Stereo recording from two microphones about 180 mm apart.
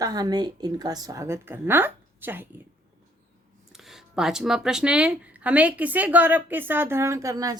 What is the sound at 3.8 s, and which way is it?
Speech, centre (ahead or behind).